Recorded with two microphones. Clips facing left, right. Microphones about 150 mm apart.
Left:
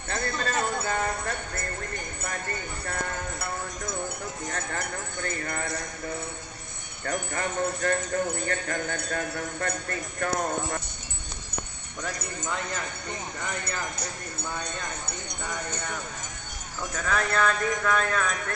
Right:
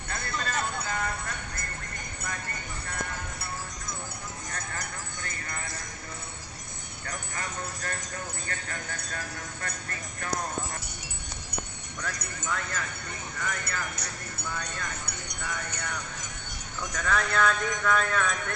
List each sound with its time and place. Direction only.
0.3 s clip-clop: 35° left (ahead or behind)
0.8 s clip-clop: 45° left (ahead or behind)
2.8 s clip-clop: 50° left (ahead or behind)
4.7 s a sound: 45° left (ahead or behind)
7.0 s speech: 50° left (ahead or behind)
12.0 s speech: 20° left (ahead or behind)
16.9 s speech: 5° left (ahead or behind)